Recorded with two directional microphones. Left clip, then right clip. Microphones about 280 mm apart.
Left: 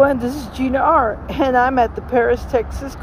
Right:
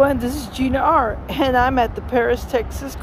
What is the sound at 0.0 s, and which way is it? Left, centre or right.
A woman's voice, centre.